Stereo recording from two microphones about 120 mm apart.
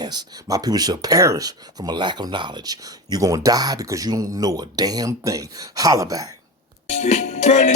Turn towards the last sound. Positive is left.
turn(degrees=65)  # may be behind; listen again after turning